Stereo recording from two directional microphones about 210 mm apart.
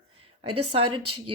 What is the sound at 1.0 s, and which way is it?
Speech, 90° right.